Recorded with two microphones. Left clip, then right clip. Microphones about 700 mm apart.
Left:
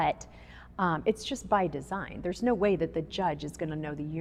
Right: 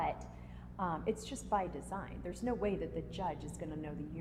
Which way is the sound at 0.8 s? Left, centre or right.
Left.